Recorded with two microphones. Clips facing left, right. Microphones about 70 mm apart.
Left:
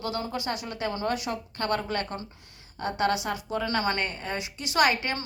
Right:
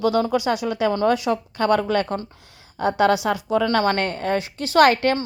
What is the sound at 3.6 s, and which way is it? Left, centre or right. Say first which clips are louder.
A woman's voice: right 6 dB; right.